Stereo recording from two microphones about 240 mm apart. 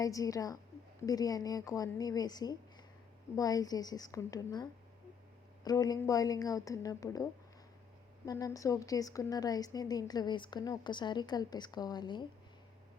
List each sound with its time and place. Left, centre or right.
0.0 s a woman's voice: centre